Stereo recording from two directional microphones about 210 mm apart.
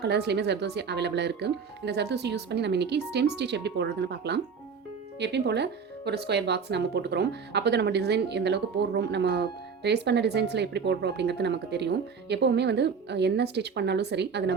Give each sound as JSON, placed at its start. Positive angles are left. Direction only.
{"t": 0.0, "sound": "speech", "side_deg": -55}